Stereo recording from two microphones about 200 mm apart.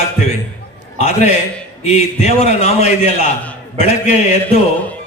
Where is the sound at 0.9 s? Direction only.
35° left (ahead or behind).